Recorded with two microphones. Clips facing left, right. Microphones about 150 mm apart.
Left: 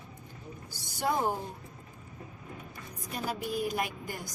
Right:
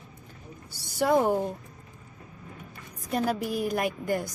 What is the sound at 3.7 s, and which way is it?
Speech, 55° right (ahead or behind).